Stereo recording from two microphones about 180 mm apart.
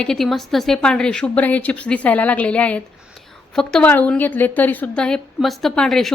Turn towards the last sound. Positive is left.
turn(degrees=0)  # may be behind; listen again after turning